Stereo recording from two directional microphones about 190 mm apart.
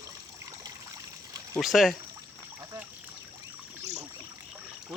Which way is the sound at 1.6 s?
Centre (ahead or behind).